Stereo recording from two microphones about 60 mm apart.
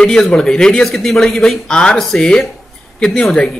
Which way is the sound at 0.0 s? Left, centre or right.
Centre.